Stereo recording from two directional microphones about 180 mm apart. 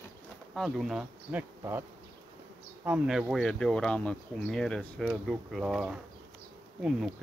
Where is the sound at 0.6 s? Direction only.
Centre (ahead or behind).